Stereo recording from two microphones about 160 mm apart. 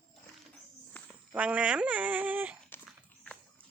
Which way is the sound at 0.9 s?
10° left (ahead or behind).